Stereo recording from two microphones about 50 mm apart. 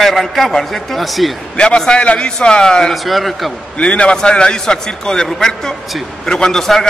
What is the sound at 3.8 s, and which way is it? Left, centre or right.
A man's voice, left.